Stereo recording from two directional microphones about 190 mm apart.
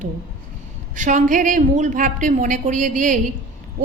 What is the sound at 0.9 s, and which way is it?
A woman's voice, 40° right (ahead or behind).